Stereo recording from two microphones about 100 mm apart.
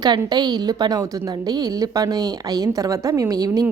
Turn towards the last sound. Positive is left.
turn(degrees=-40)  # may be behind; listen again after turning